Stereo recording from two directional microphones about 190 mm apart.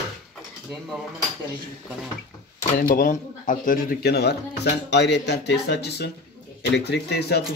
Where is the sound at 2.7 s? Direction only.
45° left (ahead or behind).